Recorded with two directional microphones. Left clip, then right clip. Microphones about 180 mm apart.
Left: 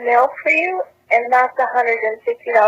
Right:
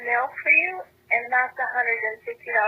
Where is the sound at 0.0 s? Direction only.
30° left (ahead or behind).